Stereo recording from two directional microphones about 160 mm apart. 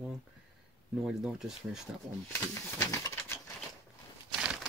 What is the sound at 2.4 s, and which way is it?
Pigeon, 15° left (ahead or behind).